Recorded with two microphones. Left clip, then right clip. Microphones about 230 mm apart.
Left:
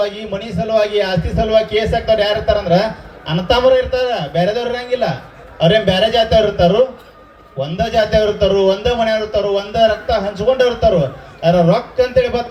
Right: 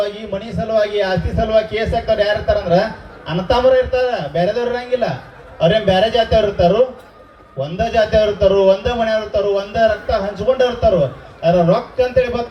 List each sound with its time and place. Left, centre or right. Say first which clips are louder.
0.0 s a man's voice: left 2 dB; left